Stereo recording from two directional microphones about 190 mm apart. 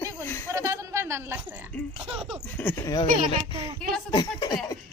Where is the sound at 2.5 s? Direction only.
10° left (ahead or behind).